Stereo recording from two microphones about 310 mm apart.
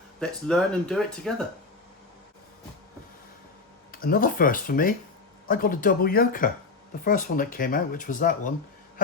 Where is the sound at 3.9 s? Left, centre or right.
Left.